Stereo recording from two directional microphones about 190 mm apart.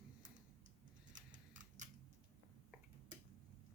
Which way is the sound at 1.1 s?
40° right (ahead or behind).